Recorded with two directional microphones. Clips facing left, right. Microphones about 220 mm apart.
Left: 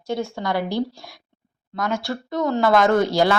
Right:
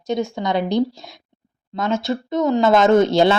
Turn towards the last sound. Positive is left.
turn(degrees=-25)  # may be behind; listen again after turning